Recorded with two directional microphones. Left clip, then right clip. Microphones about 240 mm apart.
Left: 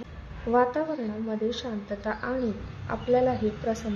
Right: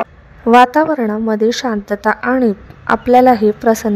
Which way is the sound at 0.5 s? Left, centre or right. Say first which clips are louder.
Right 15 dB; right.